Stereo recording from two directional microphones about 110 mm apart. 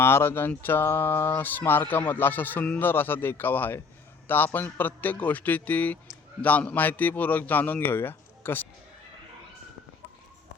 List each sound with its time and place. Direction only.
0.0 s a man's voice: 20° left (ahead or behind)